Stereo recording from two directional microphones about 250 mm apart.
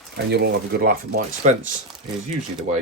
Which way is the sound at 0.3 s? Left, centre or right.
Right.